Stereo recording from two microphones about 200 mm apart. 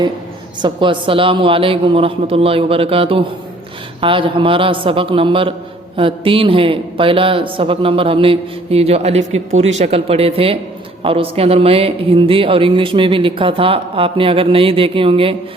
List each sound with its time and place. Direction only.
0.6 s a man's voice: 25° right (ahead or behind)